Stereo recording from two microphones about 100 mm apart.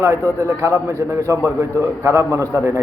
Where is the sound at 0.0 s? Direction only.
30° right (ahead or behind).